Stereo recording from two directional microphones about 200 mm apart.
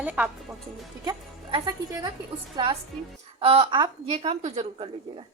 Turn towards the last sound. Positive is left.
turn(degrees=-30)  # may be behind; listen again after turning